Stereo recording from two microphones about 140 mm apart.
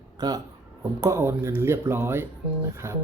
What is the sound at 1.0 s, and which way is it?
Speech, 20° right (ahead or behind).